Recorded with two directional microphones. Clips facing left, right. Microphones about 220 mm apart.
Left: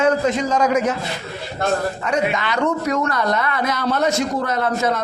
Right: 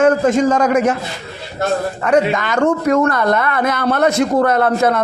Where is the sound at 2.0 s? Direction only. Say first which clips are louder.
Right 6 dB; 55° right (ahead or behind).